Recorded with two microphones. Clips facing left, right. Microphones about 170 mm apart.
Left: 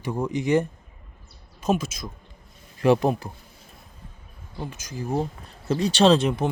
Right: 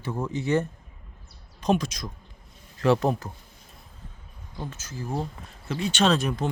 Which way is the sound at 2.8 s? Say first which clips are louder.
Left 2 dB; 15° left (ahead or behind).